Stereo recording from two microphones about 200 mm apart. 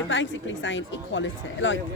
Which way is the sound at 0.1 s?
65° left (ahead or behind).